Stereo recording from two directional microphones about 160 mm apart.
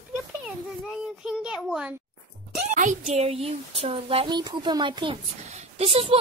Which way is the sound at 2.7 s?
50° right (ahead or behind).